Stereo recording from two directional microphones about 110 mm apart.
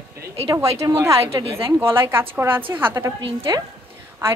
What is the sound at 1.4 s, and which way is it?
Speech, 55° right (ahead or behind).